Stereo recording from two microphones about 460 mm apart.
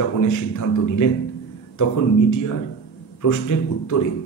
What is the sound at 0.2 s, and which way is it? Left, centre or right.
Speech, left.